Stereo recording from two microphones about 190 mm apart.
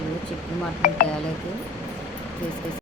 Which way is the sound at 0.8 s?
45° left (ahead or behind).